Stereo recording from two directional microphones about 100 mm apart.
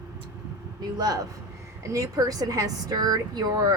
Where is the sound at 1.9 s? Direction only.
35° right (ahead or behind).